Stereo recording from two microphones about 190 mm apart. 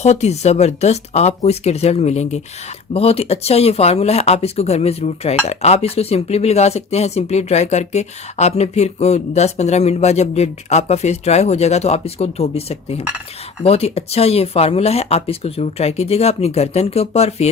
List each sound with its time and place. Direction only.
0.0 s speech: 35° left (ahead or behind)